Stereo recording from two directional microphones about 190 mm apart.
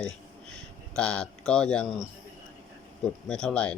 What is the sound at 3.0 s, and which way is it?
Speech, 5° left (ahead or behind).